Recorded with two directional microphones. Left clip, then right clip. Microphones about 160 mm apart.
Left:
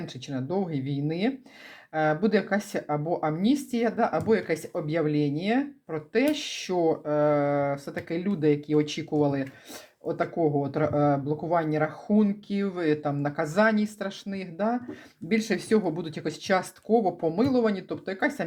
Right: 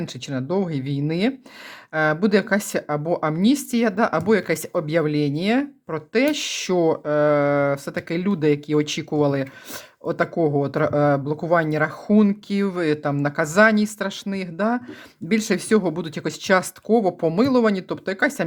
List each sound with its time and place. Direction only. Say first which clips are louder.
0.0 s speech: right 6 dB; 35° right (ahead or behind)